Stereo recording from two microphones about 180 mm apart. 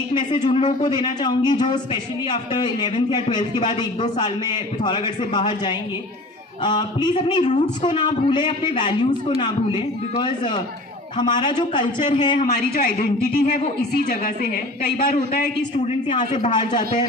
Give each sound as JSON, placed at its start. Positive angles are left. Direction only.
{"t": 0.1, "sound": "speech", "side_deg": 25}
{"t": 12.5, "sound": "a woman's voice", "side_deg": 55}
{"t": 15.9, "sound": "speech", "side_deg": 25}